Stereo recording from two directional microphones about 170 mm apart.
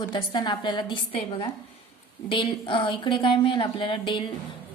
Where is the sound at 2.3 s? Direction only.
30° left (ahead or behind).